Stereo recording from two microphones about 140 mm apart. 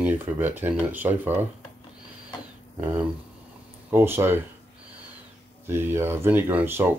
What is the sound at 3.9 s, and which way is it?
Speech, 15° right (ahead or behind).